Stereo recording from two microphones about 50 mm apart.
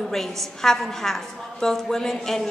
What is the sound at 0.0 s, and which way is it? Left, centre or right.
A woman's voice, centre.